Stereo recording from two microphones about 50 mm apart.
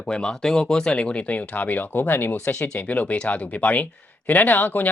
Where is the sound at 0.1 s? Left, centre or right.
Centre; by 2.3 s left.